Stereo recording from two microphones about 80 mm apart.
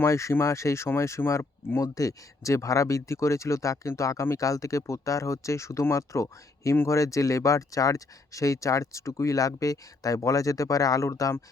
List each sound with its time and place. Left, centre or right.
0.0 s speech: left
1.8 s speech: left